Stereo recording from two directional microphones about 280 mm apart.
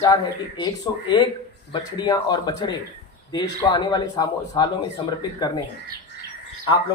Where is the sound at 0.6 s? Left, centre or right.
Centre.